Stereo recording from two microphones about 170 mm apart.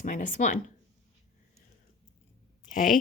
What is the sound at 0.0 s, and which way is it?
Speech, 50° left (ahead or behind).